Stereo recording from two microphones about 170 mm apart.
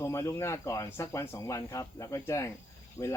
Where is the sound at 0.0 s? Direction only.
15° left (ahead or behind).